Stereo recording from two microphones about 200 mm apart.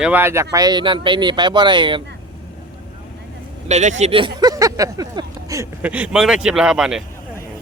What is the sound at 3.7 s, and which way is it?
Speech, 35° right (ahead or behind).